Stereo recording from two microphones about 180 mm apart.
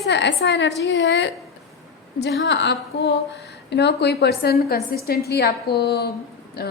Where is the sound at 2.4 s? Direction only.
75° left (ahead or behind).